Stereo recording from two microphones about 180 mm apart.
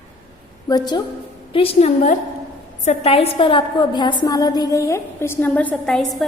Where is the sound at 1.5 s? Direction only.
35° left (ahead or behind).